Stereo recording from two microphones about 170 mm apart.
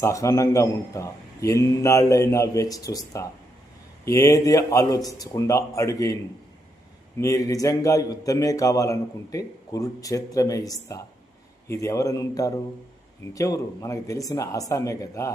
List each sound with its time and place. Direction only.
0.0 s a man's voice: 20° left (ahead or behind)
7.2 s a man's voice: 20° left (ahead or behind)